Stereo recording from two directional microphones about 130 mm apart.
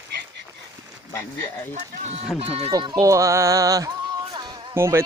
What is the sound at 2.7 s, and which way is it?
Speech, 30° right (ahead or behind).